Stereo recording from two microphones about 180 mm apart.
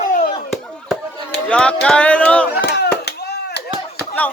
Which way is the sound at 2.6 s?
65° left (ahead or behind).